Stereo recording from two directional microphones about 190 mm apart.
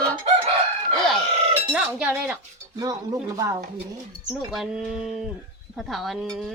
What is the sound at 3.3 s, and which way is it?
Speech, 15° right (ahead or behind).